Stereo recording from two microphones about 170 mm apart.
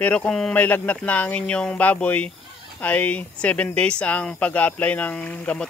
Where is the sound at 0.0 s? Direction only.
5° left (ahead or behind).